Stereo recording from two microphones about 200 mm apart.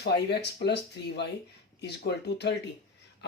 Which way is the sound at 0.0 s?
55° left (ahead or behind).